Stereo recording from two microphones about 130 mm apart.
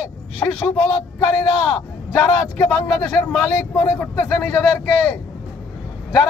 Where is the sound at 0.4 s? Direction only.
20° left (ahead or behind).